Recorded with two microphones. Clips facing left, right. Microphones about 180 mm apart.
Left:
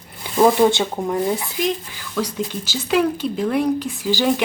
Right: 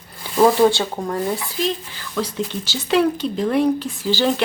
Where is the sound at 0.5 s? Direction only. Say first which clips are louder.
Even; 20° left (ahead or behind).